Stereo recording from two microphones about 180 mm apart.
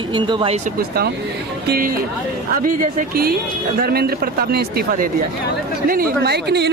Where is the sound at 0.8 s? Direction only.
60° right (ahead or behind).